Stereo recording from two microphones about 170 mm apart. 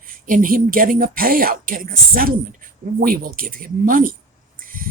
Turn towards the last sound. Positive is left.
turn(degrees=-55)  # may be behind; listen again after turning